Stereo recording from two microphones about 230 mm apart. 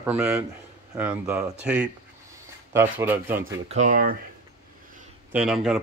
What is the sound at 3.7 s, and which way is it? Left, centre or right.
Speech, right.